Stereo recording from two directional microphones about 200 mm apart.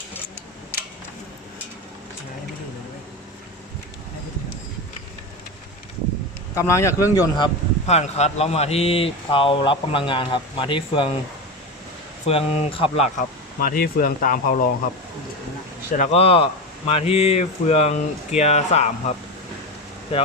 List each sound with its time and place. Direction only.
6.5 s speech: 15° left (ahead or behind)
12.2 s speech: 30° left (ahead or behind)
13.1 s speech: 45° left (ahead or behind)
16.0 s speech: 30° left (ahead or behind)